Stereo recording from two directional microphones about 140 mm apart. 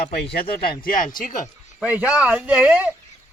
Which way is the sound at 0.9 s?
70° left (ahead or behind).